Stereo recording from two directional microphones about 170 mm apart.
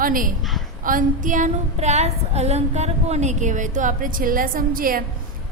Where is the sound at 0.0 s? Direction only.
55° right (ahead or behind).